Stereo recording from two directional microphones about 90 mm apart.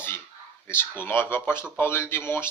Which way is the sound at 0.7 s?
25° left (ahead or behind).